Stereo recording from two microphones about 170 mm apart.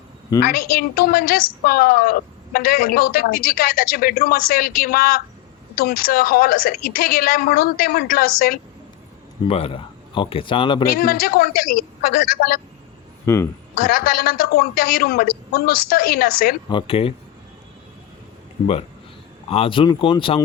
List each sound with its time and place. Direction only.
0.4 s a woman's voice: 60° left (ahead or behind)
9.5 s speech: 35° left (ahead or behind)
10.9 s a woman's voice: 60° left (ahead or behind)
13.2 s speech: 15° left (ahead or behind)
13.8 s a woman's voice: 60° left (ahead or behind)
16.6 s speech: 30° left (ahead or behind)
19.5 s speech: 35° left (ahead or behind)